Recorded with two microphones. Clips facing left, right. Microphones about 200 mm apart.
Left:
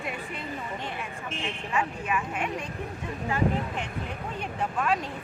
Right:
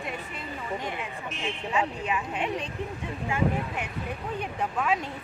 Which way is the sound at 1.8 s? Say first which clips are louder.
Even; 20° right (ahead or behind).